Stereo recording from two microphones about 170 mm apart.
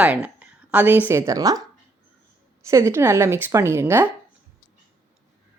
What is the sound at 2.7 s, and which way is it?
Speech, 15° right (ahead or behind).